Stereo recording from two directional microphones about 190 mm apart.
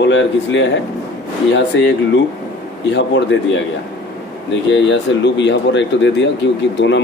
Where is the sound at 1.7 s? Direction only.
70° left (ahead or behind).